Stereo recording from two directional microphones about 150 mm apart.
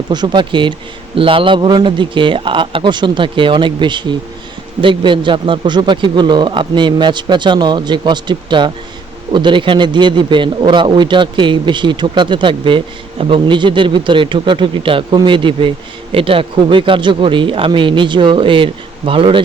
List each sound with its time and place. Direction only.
0.1 s a man's voice: 30° right (ahead or behind)